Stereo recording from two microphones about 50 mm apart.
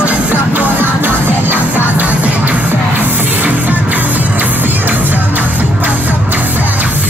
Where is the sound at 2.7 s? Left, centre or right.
Right.